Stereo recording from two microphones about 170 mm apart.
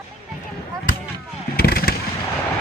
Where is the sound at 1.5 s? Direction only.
65° left (ahead or behind).